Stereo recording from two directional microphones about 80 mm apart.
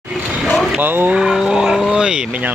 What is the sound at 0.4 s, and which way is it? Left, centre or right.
Vehicle, centre.